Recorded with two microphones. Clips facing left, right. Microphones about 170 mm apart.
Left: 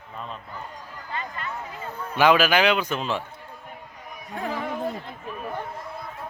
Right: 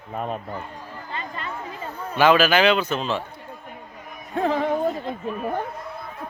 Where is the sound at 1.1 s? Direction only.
25° right (ahead or behind).